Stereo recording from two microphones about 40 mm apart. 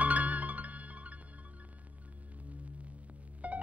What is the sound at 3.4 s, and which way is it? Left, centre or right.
Music, right.